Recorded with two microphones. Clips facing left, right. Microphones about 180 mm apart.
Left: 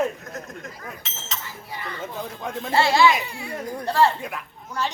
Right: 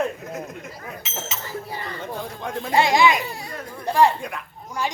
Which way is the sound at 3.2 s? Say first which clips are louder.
Right 2 dB; 40° right (ahead or behind).